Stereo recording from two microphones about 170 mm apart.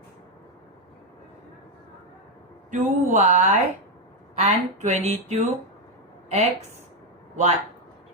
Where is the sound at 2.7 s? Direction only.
45° right (ahead or behind).